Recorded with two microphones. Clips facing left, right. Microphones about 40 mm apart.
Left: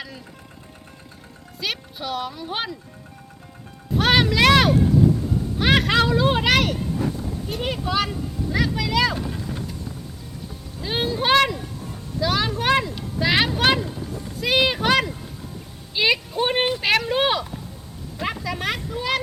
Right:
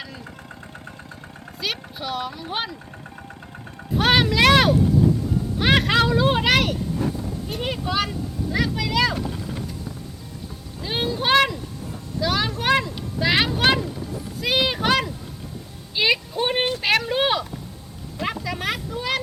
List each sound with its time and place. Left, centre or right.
1.6 s speech: centre
3.9 s a sound: centre
5.5 s music: centre
7.4 s speech: centre
10.8 s speech: centre